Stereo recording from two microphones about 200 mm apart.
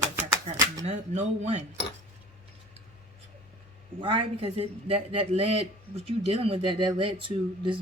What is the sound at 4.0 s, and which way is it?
Speech, 25° right (ahead or behind).